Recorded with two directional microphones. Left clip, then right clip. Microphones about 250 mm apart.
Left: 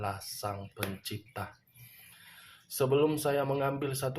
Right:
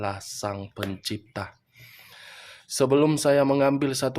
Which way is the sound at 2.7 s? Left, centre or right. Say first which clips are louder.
Right 7 dB; right.